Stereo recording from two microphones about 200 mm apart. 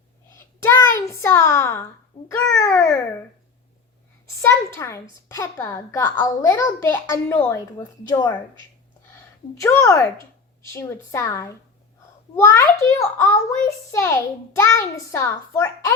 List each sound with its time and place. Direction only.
0.3 s a sound: 10° left (ahead or behind)
1.2 s a child's voice: 15° left (ahead or behind)
4.4 s a child's voice: 15° left (ahead or behind)
9.6 s a child's voice: 15° left (ahead or behind)